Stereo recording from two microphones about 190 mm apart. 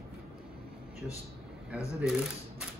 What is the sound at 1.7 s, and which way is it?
Speech, 5° right (ahead or behind).